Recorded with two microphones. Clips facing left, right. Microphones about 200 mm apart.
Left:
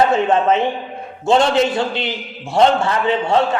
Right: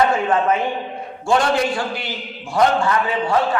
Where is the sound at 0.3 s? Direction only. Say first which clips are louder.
Left 3 dB; 25° left (ahead or behind).